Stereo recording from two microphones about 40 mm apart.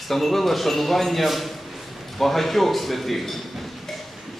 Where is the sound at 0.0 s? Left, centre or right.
Centre.